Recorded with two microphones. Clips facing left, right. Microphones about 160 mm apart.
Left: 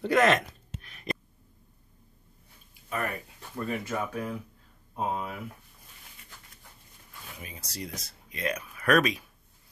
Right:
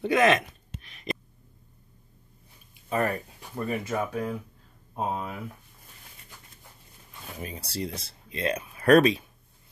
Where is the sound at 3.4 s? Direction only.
15° right (ahead or behind).